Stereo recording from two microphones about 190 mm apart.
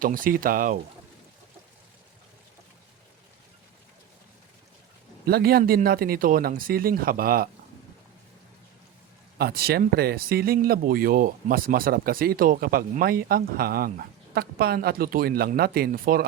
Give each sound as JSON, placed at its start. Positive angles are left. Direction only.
{"t": 0.0, "sound": "speech", "side_deg": -45}
{"t": 5.2, "sound": "speech", "side_deg": -55}
{"t": 9.4, "sound": "speech", "side_deg": -55}